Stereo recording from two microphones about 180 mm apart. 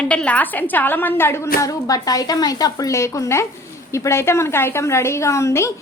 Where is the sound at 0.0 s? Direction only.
5° left (ahead or behind).